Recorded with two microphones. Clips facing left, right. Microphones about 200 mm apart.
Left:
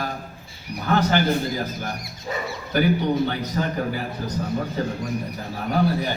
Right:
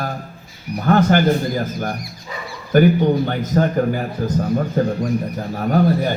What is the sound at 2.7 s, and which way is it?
A man's voice, 50° right (ahead or behind).